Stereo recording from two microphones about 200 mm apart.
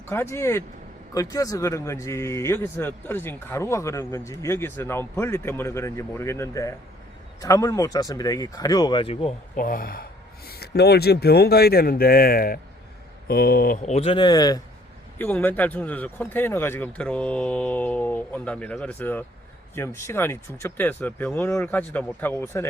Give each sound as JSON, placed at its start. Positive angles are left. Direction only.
{"t": 0.1, "sound": "a man's voice", "side_deg": 15}
{"t": 9.6, "sound": "speech", "side_deg": 45}
{"t": 13.9, "sound": "speech", "side_deg": 30}
{"t": 15.2, "sound": "a man's voice", "side_deg": 10}